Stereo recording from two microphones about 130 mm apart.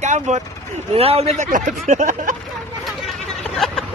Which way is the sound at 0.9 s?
50° right (ahead or behind).